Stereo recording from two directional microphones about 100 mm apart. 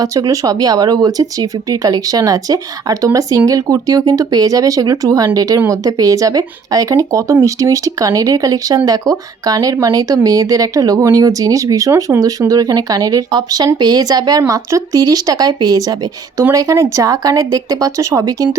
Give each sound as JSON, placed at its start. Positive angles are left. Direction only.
{"t": 0.0, "sound": "speech", "side_deg": -35}